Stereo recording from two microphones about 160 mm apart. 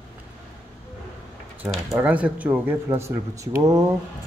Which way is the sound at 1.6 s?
10° right (ahead or behind).